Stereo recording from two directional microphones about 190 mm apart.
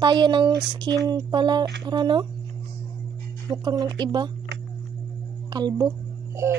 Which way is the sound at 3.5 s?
25° right (ahead or behind).